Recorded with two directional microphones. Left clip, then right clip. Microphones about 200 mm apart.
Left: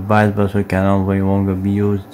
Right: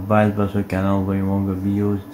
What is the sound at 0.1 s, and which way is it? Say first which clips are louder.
Speech: left 3 dB; 50° left (ahead or behind).